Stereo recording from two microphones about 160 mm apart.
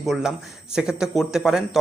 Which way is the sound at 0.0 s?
Centre (ahead or behind).